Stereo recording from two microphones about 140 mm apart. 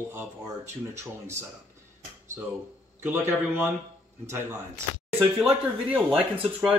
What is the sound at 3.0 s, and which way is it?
Speech, 15° right (ahead or behind).